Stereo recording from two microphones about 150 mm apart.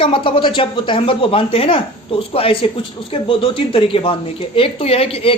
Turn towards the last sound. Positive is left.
turn(degrees=40)  # may be behind; listen again after turning